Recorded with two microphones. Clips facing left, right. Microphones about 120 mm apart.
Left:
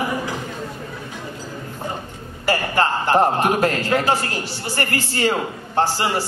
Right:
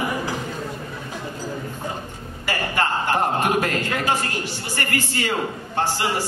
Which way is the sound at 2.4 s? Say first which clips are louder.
Left 4 dB; 40° left (ahead or behind).